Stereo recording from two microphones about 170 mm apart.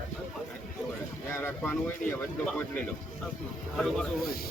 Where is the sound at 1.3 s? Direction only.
15° left (ahead or behind).